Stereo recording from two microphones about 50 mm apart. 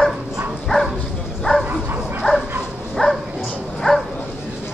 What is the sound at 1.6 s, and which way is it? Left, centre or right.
Bow-wow, centre.